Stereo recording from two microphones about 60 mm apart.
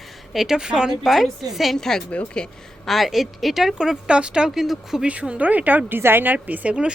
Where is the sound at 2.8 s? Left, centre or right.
Centre.